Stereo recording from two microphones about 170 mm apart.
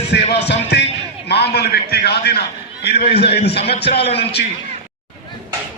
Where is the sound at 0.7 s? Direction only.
75° left (ahead or behind).